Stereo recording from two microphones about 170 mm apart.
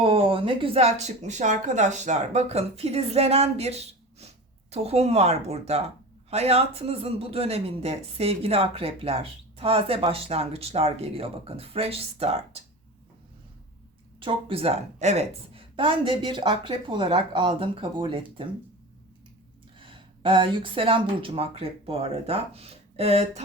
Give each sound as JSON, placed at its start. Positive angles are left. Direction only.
{"t": 0.0, "sound": "speech", "side_deg": -35}
{"t": 14.2, "sound": "speech", "side_deg": -30}
{"t": 19.8, "sound": "speech", "side_deg": -30}